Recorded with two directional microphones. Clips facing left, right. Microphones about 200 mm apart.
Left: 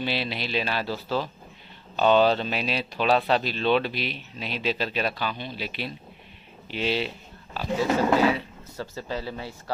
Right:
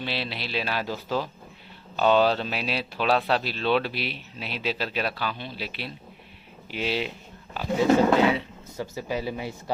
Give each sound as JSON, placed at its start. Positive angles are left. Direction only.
{"t": 0.0, "sound": "speech", "side_deg": 0}
{"t": 7.5, "sound": "speech", "side_deg": -20}